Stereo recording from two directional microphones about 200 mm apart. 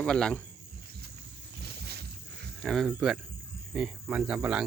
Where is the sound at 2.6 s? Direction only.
Centre (ahead or behind).